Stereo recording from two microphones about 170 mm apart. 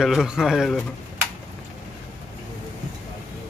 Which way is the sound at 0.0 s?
Centre (ahead or behind).